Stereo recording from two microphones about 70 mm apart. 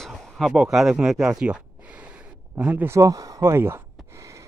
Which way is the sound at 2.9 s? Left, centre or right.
Right.